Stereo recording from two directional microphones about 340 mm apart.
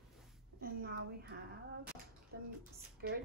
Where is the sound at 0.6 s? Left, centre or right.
Right.